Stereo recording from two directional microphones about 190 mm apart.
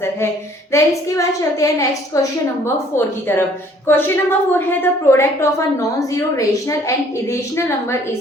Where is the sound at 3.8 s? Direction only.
10° left (ahead or behind).